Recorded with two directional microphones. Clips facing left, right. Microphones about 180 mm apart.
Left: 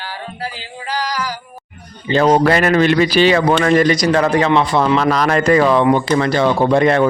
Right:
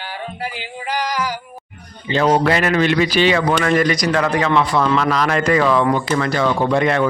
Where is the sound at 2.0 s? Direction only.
40° left (ahead or behind); by 5.1 s 25° left (ahead or behind).